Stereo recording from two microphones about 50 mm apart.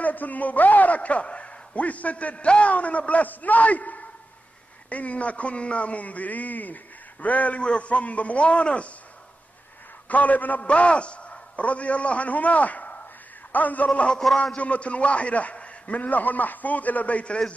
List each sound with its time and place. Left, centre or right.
0.0 s a man's voice: left
10.0 s a man's voice: left
13.8 s a man's voice: left
14.1 s a man's voice: centre
14.6 s a man's voice: left